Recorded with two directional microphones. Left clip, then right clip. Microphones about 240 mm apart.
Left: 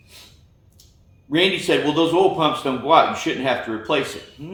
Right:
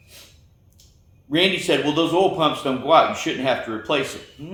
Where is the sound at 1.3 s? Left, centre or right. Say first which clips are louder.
Left 1 dB; centre.